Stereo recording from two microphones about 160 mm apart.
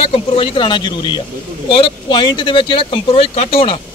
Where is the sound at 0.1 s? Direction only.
30° left (ahead or behind).